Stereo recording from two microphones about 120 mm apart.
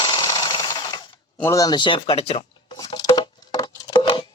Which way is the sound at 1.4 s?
25° left (ahead or behind).